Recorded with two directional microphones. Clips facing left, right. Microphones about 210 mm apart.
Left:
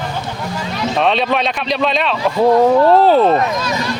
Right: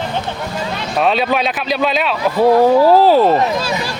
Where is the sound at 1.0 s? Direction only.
5° right (ahead or behind).